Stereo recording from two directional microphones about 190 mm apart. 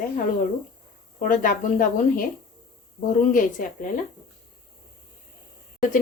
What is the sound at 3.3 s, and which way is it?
Speech, 45° left (ahead or behind).